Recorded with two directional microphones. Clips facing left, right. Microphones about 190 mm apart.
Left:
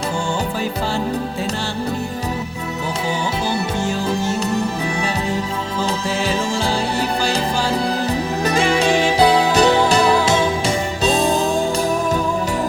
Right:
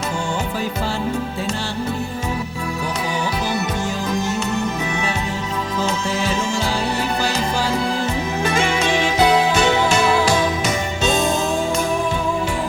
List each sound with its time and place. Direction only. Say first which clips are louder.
8.4 s music: left 4 dB; 35° left (ahead or behind)